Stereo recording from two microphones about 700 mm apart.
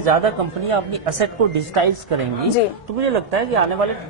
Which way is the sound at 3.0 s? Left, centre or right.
Right.